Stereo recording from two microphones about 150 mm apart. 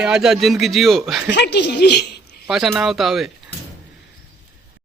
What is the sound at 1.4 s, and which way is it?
Speech, 90° left.